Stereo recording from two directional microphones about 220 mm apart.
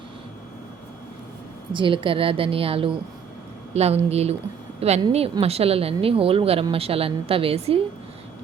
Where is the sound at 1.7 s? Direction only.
25° right (ahead or behind).